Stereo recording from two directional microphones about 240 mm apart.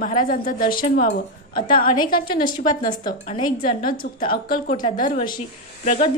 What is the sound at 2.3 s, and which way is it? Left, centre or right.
A woman's voice, centre.